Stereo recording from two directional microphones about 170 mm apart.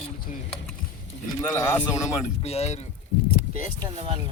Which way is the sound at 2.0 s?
40° left (ahead or behind).